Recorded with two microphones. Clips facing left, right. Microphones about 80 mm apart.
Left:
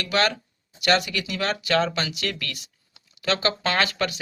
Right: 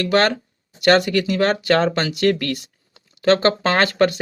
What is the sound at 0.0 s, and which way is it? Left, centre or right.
Speech, right.